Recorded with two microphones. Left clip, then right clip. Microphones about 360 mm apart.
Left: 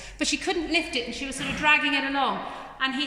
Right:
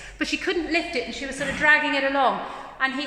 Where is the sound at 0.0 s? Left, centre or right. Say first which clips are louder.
Right 1 dB; centre.